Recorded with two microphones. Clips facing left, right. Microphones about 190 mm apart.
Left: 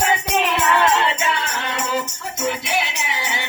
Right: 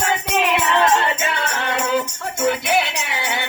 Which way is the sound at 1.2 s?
55° right (ahead or behind).